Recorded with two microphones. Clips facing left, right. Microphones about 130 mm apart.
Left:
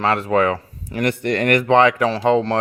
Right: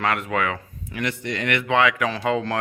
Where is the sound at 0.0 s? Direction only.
30° left (ahead or behind).